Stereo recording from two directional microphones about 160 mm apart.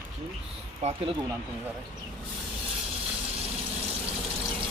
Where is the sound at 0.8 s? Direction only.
40° right (ahead or behind).